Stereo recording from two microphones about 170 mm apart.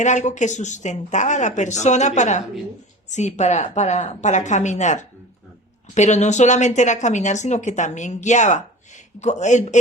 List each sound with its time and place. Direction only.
0.0 s speech: 45° left (ahead or behind)